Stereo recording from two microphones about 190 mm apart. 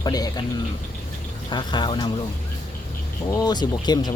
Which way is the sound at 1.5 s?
25° left (ahead or behind).